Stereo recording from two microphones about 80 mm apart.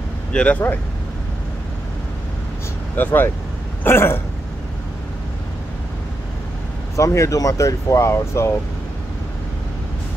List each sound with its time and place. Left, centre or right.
0.3 s speech: centre
3.0 s speech: left
7.0 s speech: left